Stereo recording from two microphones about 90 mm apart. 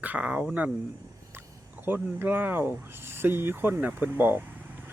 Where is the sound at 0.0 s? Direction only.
15° right (ahead or behind).